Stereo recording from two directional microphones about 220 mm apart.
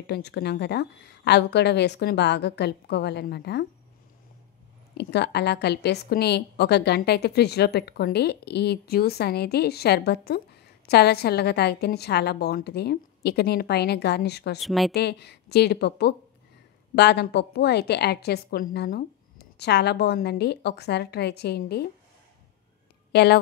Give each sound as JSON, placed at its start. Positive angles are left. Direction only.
{"t": 0.0, "sound": "a woman's voice", "side_deg": 50}
{"t": 4.9, "sound": "a woman's voice", "side_deg": 50}
{"t": 14.6, "sound": "a woman's voice", "side_deg": 0}
{"t": 15.0, "sound": "a woman's voice", "side_deg": 50}
{"t": 23.1, "sound": "a woman's voice", "side_deg": 45}